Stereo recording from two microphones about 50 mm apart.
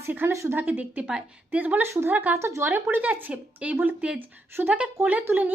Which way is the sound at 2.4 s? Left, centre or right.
Right.